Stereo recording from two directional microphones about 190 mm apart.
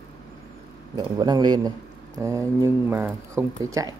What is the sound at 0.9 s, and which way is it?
A man's voice, 20° right (ahead or behind).